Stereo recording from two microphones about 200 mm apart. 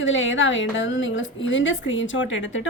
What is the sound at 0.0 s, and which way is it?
A woman's voice, 70° left (ahead or behind).